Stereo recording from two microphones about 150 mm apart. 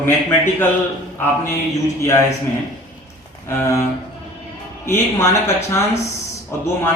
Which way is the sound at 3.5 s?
15° left (ahead or behind).